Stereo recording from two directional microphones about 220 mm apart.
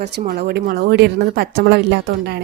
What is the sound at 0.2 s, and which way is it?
Speech, 45° right (ahead or behind).